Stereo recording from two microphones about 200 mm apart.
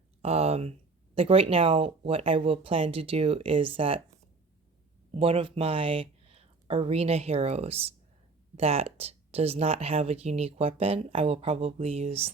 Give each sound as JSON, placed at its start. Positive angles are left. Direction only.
{"t": 0.2, "sound": "speech", "side_deg": -30}
{"t": 5.1, "sound": "speech", "side_deg": -25}